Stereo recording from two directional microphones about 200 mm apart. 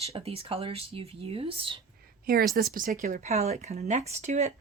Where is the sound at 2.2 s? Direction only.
50° right (ahead or behind).